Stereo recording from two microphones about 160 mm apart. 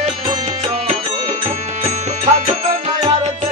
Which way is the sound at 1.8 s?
45° right (ahead or behind).